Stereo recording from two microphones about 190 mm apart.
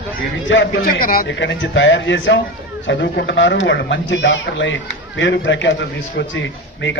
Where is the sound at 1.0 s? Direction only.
50° left (ahead or behind).